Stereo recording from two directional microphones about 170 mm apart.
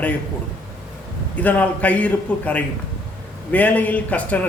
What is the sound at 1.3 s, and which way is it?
A man's voice, 10° left (ahead or behind).